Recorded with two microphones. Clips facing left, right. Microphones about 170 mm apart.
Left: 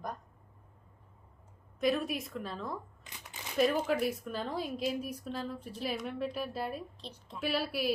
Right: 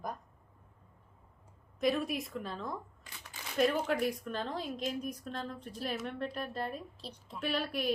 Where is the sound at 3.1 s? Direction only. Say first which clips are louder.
Left 1 dB; 20° left (ahead or behind).